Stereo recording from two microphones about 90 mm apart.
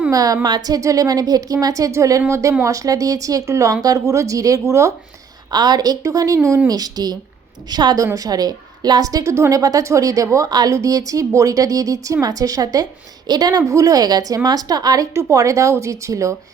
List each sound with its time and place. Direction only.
0.1 s a woman's voice: 45° right (ahead or behind)
5.5 s a woman's voice: 50° right (ahead or behind); by 6.6 s 35° right (ahead or behind)
6.7 s a woman's voice: 45° right (ahead or behind)
15.1 s a woman's voice: 35° right (ahead or behind)